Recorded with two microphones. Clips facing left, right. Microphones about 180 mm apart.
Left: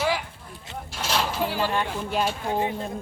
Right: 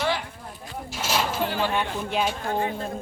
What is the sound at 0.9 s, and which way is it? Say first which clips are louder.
Speech: even; 5° right (ahead or behind).